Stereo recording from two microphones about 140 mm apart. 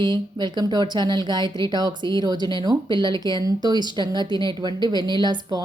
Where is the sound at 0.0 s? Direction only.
30° right (ahead or behind).